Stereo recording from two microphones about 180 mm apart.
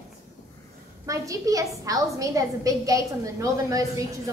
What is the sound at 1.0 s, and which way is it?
A woman's voice, 20° right (ahead or behind).